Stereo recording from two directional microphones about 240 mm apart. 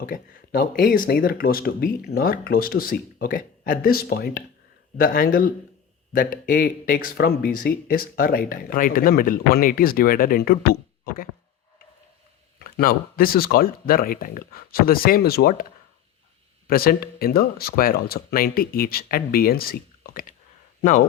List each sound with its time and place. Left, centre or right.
0.0 s speech: left
12.5 s speech: left
16.6 s speech: left